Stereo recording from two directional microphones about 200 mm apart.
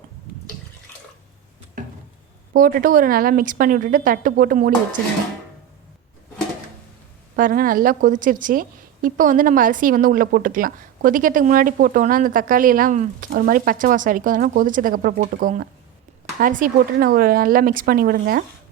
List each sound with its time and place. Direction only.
2.5 s a woman's voice: 45° right (ahead or behind)
7.3 s a woman's voice: 45° right (ahead or behind)